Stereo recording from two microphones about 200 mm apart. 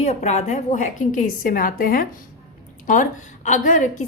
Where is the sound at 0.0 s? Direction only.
35° left (ahead or behind).